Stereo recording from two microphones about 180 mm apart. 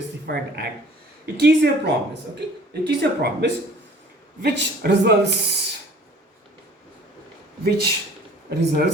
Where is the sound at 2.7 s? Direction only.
65° right (ahead or behind).